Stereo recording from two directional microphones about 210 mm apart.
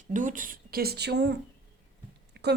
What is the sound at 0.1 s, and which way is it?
A woman's voice, 40° right (ahead or behind).